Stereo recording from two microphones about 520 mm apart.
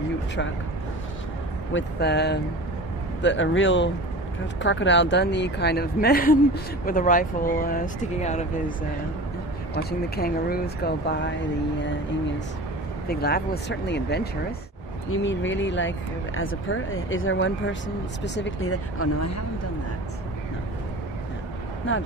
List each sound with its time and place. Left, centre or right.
1.7 s a woman's voice: left
9.8 s a woman's voice: centre
13.1 s a woman's voice: centre
21.9 s speech: left